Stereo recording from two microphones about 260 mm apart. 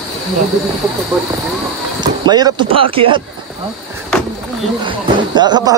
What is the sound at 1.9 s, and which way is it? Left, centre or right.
Speech, centre.